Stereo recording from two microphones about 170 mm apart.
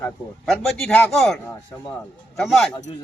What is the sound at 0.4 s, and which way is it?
Speech, centre (ahead or behind).